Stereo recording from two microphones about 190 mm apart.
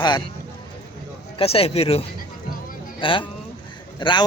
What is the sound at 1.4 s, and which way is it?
A man's voice, 30° left (ahead or behind).